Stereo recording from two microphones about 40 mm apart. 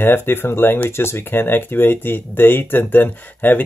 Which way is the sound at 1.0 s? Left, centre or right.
Left.